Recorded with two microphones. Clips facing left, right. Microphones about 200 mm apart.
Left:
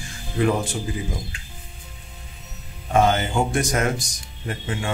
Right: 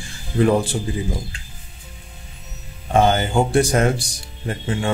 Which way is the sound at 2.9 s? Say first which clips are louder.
Right 2 dB; 30° right (ahead or behind).